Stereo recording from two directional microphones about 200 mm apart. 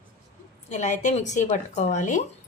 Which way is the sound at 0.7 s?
35° left (ahead or behind).